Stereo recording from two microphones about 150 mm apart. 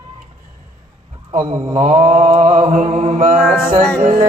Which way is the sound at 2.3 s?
40° right (ahead or behind).